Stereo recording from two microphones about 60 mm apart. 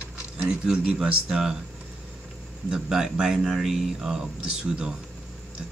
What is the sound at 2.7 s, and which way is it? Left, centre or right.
Speech, centre.